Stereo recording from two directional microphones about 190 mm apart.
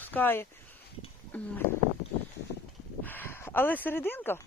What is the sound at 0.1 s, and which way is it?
Speech, 10° left (ahead or behind).